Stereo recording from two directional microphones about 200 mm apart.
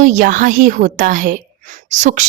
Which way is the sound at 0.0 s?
40° right (ahead or behind).